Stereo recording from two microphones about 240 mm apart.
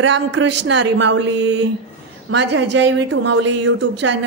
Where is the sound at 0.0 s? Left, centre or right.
Right.